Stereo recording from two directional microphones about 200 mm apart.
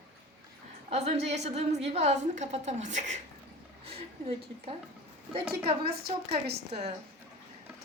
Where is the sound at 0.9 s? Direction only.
30° right (ahead or behind).